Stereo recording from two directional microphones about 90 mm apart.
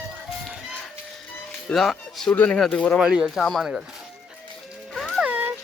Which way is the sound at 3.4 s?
Centre (ahead or behind).